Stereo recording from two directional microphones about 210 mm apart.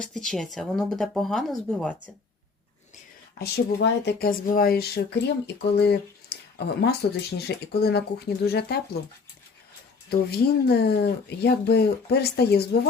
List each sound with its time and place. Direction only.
0.0 s speech: centre (ahead or behind)
2.9 s speech: 50° left (ahead or behind)
10.1 s speech: 50° left (ahead or behind)